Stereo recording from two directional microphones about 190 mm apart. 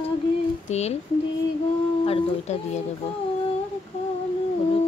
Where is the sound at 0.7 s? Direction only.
35° left (ahead or behind).